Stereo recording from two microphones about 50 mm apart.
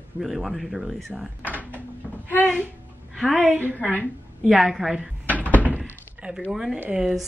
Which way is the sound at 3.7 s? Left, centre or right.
Left.